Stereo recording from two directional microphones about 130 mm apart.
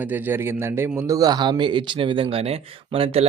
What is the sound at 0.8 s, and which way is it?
Speech, 25° right (ahead or behind).